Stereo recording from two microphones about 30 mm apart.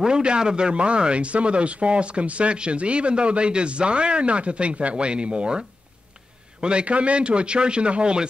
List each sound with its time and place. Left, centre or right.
0.0 s speech: right
6.6 s speech: right